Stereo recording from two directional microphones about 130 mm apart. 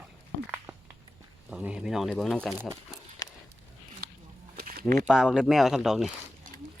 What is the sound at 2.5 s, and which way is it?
Speech, 15° right (ahead or behind).